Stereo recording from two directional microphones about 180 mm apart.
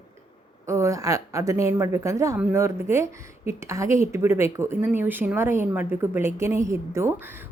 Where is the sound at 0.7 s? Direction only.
15° right (ahead or behind).